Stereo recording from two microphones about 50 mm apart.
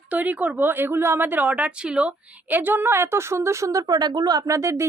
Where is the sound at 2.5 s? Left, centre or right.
Right.